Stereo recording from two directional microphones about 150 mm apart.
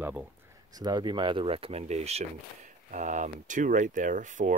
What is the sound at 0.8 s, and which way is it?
Speech, 30° right (ahead or behind).